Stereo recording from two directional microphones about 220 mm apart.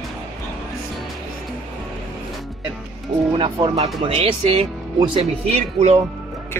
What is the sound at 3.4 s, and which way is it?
Speech, 25° right (ahead or behind).